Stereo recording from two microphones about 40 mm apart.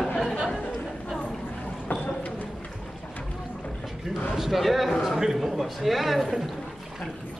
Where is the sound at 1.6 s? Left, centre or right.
Left.